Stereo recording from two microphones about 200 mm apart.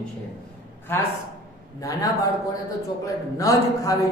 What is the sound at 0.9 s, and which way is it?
A man's voice, 10° left (ahead or behind).